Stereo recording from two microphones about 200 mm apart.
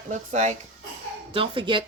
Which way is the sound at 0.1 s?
35° right (ahead or behind).